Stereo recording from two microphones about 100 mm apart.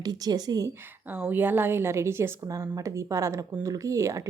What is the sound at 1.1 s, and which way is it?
A woman's voice, 20° right (ahead or behind).